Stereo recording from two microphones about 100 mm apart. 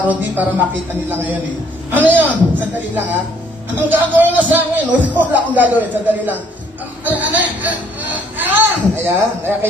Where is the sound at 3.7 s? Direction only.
20° right (ahead or behind).